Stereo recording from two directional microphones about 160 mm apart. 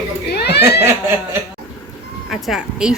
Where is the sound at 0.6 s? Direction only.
15° right (ahead or behind).